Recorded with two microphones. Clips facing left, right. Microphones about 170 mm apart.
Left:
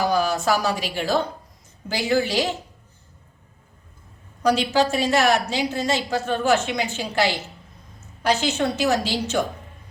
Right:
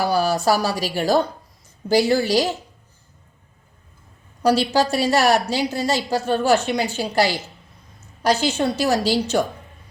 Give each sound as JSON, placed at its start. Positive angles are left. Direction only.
{"t": 0.1, "sound": "a woman's voice", "side_deg": -35}
{"t": 4.4, "sound": "speech", "side_deg": -35}